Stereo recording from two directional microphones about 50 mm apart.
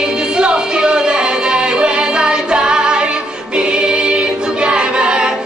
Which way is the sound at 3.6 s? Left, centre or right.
Centre.